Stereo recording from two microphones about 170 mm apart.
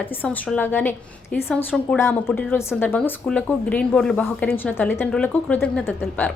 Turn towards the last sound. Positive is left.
turn(degrees=5)  # may be behind; listen again after turning